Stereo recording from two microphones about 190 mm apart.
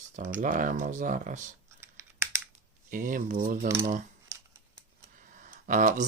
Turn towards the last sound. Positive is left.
turn(degrees=-40)  # may be behind; listen again after turning